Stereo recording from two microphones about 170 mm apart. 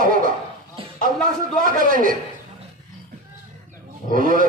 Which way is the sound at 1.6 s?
55° right (ahead or behind).